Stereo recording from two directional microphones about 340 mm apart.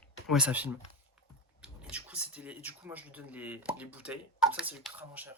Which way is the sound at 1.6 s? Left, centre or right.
Centre.